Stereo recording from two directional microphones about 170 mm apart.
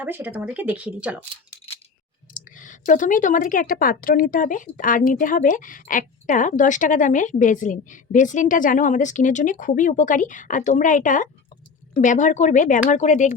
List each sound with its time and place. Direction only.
0.0 s speech: 10° right (ahead or behind)
2.6 s speech: 50° left (ahead or behind)